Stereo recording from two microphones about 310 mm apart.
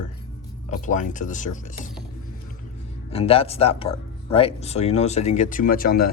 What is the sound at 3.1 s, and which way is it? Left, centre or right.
Speech, centre.